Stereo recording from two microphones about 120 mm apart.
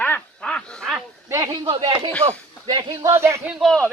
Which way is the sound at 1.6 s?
45° right (ahead or behind).